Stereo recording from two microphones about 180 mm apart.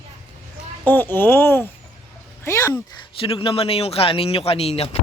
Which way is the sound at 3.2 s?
30° left (ahead or behind).